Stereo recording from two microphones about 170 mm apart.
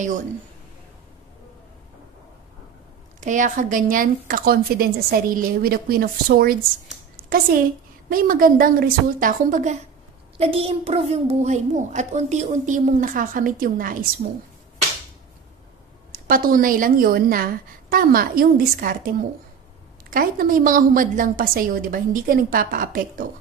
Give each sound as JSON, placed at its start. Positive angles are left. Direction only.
{"t": 3.2, "sound": "a woman's voice", "side_deg": -50}
{"t": 8.1, "sound": "a woman's voice", "side_deg": -55}
{"t": 10.3, "sound": "a child's voice", "side_deg": -35}
{"t": 16.1, "sound": "a woman's voice", "side_deg": -60}